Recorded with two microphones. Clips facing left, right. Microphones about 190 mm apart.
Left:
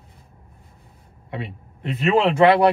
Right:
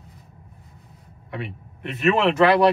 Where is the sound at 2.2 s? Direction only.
30° left (ahead or behind).